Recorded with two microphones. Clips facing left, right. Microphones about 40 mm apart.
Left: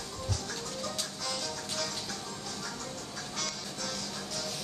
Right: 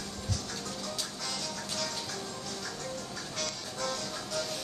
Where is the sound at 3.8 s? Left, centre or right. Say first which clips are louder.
Right 4 dB; centre.